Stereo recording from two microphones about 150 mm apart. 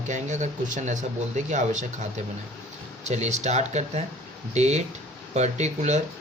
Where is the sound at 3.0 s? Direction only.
50° right (ahead or behind).